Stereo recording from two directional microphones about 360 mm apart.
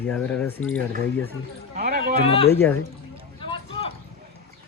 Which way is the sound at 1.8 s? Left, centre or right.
Right.